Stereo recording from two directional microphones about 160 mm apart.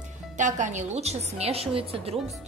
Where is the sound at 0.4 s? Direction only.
50° right (ahead or behind).